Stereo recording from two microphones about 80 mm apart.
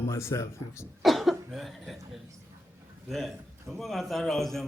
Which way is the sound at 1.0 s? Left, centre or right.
Centre.